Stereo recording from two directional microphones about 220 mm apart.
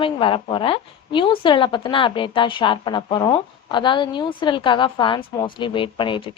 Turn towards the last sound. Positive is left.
turn(degrees=20)  # may be behind; listen again after turning